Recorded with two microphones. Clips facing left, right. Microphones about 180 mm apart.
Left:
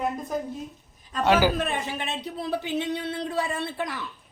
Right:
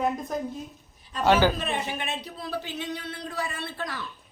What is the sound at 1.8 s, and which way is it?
A man's voice, 35° left (ahead or behind).